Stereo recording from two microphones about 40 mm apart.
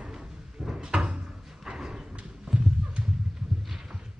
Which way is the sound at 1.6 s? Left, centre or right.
Centre.